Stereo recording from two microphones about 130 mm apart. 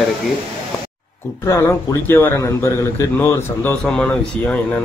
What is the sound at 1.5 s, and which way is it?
Speech, 20° left (ahead or behind).